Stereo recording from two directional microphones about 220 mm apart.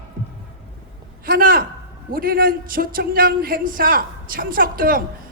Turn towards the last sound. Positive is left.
turn(degrees=-40)  # may be behind; listen again after turning